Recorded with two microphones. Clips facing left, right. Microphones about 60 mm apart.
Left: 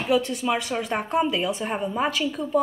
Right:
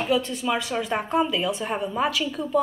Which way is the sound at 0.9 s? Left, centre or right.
Centre.